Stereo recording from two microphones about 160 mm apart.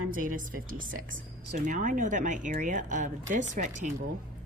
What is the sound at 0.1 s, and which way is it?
Speech, 55° right (ahead or behind).